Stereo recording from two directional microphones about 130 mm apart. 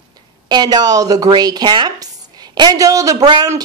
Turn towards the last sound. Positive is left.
turn(degrees=-30)  # may be behind; listen again after turning